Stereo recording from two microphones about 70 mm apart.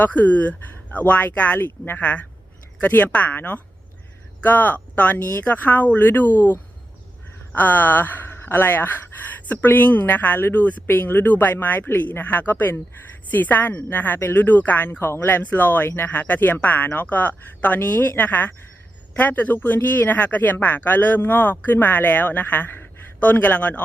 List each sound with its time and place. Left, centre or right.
0.0 s a woman's voice: left